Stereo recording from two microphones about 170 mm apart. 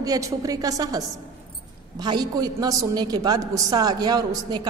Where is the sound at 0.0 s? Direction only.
20° right (ahead or behind).